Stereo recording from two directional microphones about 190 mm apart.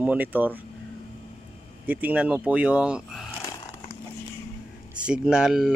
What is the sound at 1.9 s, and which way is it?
Speech, 10° right (ahead or behind).